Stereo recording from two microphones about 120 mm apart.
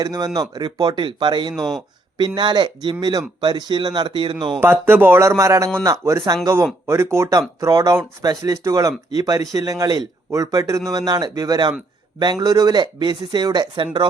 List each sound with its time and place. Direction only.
0.0 s speech: 35° right (ahead or behind)
4.6 s speech: 20° right (ahead or behind); by 14.1 s 40° right (ahead or behind)